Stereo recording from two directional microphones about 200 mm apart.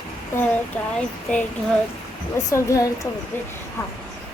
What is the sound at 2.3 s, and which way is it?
Speech, 15° left (ahead or behind).